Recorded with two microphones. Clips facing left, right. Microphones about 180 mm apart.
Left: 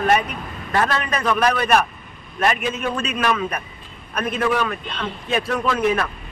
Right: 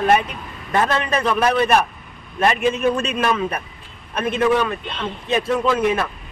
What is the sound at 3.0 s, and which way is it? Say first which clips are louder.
A man's voice: right 1 dB; 30° right (ahead or behind).